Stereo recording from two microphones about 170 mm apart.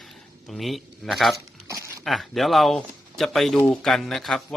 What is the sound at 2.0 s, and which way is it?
A man's voice, centre (ahead or behind).